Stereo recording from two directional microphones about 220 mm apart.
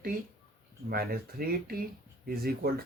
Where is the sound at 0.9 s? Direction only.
45° right (ahead or behind).